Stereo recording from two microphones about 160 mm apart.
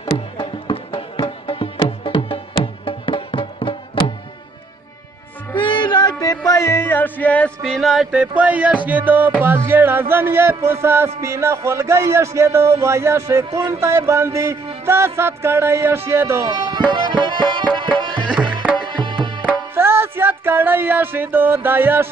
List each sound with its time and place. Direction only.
0.1 s music: 35° left (ahead or behind)
5.6 s music: 30° left (ahead or behind); by 16.4 s 15° right (ahead or behind)
16.4 s music: 25° right (ahead or behind)
18.3 s music: 5° right (ahead or behind)
18.8 s music: 30° right (ahead or behind)
19.7 s music: 15° right (ahead or behind)